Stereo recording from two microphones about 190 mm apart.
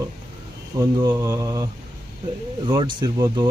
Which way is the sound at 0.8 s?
15° right (ahead or behind).